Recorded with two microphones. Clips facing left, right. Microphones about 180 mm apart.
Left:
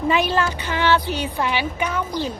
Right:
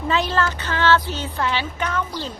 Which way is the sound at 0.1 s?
15° left (ahead or behind).